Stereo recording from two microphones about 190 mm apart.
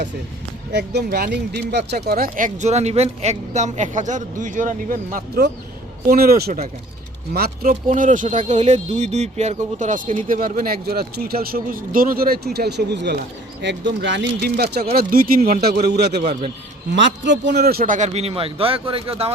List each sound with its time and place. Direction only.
0.7 s speech: 60° right (ahead or behind)
2.0 s speech: 50° right (ahead or behind)
16.2 s speech: 35° right (ahead or behind)
16.9 s speech: 70° right (ahead or behind); by 19.3 s 30° right (ahead or behind)